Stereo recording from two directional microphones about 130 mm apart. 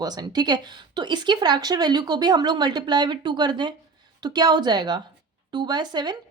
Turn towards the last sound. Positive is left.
turn(degrees=-35)  # may be behind; listen again after turning